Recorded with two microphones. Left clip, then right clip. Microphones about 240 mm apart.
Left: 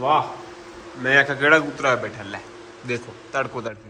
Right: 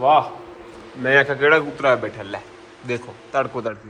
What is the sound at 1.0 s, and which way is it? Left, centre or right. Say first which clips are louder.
Speech: right 1 dB; centre.